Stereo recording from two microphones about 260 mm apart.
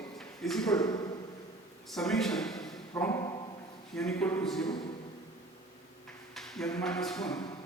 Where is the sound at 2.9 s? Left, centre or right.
Centre.